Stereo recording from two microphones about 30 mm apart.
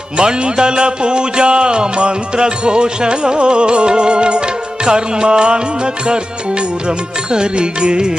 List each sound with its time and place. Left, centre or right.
0.2 s music: right